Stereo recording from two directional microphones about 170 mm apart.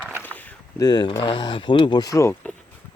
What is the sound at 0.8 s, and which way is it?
Speech, 25° left (ahead or behind).